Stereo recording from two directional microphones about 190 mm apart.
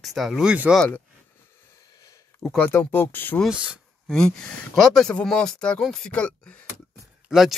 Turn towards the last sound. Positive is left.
turn(degrees=0)  # may be behind; listen again after turning